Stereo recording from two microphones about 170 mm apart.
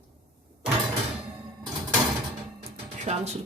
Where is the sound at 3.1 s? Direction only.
40° right (ahead or behind).